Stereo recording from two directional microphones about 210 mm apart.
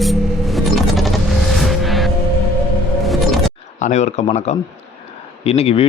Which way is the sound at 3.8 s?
35° left (ahead or behind).